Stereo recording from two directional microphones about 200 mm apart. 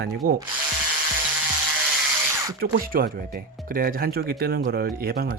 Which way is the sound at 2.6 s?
45° right (ahead or behind).